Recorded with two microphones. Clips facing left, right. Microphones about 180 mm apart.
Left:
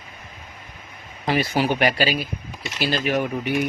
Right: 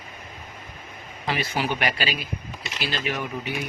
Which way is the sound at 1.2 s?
40° left (ahead or behind).